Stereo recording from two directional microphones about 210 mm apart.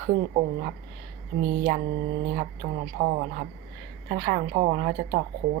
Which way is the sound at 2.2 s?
40° right (ahead or behind).